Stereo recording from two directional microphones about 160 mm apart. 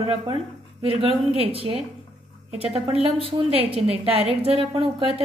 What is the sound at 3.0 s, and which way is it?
Speech, 35° right (ahead or behind).